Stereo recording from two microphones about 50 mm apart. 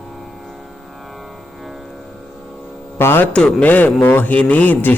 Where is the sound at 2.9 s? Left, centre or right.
Left.